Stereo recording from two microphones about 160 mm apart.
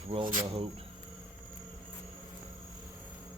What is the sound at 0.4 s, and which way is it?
Speech, 40° right (ahead or behind).